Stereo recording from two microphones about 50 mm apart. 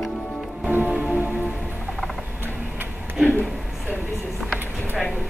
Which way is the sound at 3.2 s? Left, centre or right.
Left.